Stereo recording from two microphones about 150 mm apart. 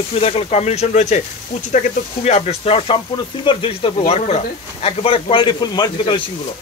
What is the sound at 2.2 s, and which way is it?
Speech, 45° left (ahead or behind).